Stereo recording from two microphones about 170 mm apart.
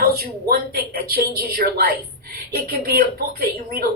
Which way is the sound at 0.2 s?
60° right (ahead or behind).